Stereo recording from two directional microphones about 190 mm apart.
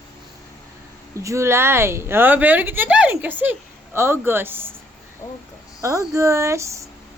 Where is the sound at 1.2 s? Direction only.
15° right (ahead or behind).